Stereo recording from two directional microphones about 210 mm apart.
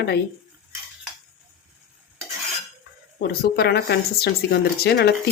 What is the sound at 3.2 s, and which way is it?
Speech, 50° left (ahead or behind).